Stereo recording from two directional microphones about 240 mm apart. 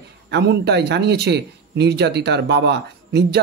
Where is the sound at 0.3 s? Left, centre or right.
Right.